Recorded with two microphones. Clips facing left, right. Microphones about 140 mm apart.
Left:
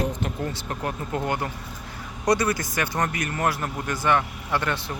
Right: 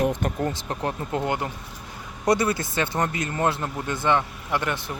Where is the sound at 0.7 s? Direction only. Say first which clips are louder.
Right 1 dB; 25° right (ahead or behind).